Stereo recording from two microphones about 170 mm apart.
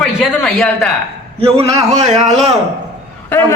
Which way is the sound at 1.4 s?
35° right (ahead or behind).